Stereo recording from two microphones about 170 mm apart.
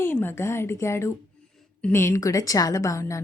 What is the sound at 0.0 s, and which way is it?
A woman's voice, 15° left (ahead or behind).